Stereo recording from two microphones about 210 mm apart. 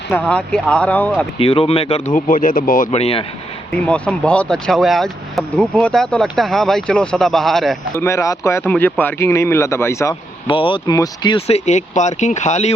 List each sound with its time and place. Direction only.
0.1 s speech: 5° left (ahead or behind)
1.4 s speech: 25° left (ahead or behind); by 2.9 s 40° left (ahead or behind)
2.9 s speech: 30° left (ahead or behind)
3.7 s speech: 5° left (ahead or behind)
7.9 s speech: 15° left (ahead or behind)
10.4 s speech: 25° left (ahead or behind)